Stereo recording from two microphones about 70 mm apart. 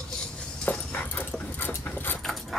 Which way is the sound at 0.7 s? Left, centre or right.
Left.